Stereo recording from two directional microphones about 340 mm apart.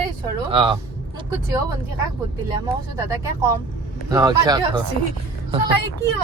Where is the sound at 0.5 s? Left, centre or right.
Centre.